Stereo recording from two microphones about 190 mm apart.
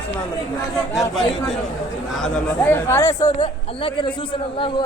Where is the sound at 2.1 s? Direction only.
5° left (ahead or behind).